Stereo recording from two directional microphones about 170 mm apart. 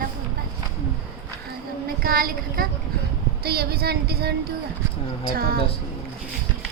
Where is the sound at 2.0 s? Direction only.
60° right (ahead or behind).